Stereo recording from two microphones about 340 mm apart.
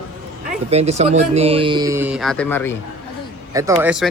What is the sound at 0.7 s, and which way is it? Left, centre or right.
Speech, centre.